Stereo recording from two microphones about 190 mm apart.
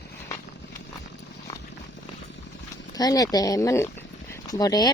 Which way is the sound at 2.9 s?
20° left (ahead or behind).